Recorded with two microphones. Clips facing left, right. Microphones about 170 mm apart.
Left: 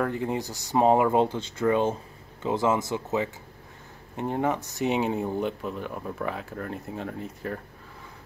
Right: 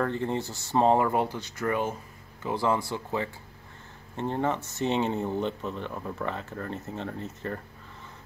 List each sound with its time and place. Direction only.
0.0 s speech: 15° left (ahead or behind)